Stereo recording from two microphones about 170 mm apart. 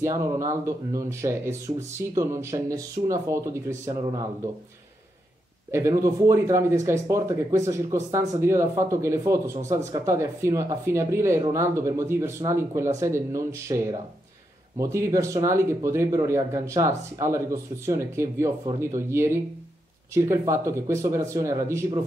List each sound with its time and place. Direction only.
0.0 s speech: 20° right (ahead or behind)
5.7 s speech: 15° right (ahead or behind)